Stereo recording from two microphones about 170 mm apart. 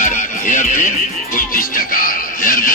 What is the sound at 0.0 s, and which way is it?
Music, 50° left (ahead or behind).